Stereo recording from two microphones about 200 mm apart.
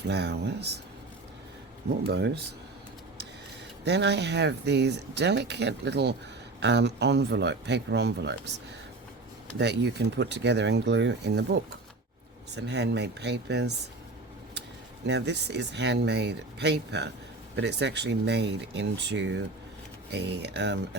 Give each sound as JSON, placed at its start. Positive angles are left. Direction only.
{"t": 0.1, "sound": "speech", "side_deg": -55}
{"t": 2.0, "sound": "speech", "side_deg": -55}
{"t": 3.8, "sound": "speech", "side_deg": -60}
{"t": 9.6, "sound": "speech", "side_deg": -55}
{"t": 15.0, "sound": "speech", "side_deg": -60}